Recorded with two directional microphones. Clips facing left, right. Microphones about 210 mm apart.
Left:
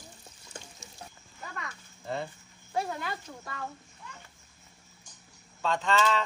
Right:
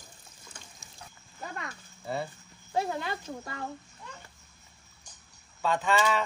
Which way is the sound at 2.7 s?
25° right (ahead or behind).